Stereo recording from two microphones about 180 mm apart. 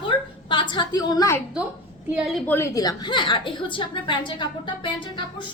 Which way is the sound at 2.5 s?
15° left (ahead or behind).